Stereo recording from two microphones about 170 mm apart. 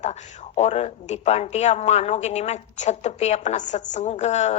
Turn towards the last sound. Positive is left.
turn(degrees=40)  # may be behind; listen again after turning